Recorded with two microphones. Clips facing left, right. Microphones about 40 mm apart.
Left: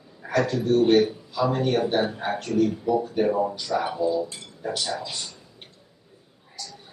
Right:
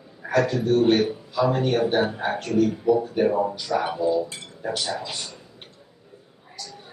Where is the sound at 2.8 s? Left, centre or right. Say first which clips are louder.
Right 3 dB; centre.